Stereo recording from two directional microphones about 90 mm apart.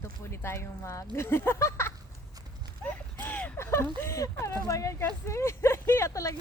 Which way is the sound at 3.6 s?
30° left (ahead or behind).